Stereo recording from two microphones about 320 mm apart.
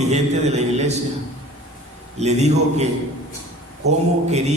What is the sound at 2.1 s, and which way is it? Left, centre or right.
Speech, right.